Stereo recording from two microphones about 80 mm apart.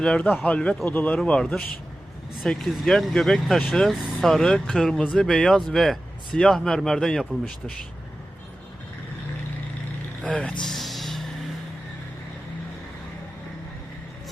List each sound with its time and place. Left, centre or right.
0.4 s speech: centre
10.2 s speech: centre
10.7 s music: centre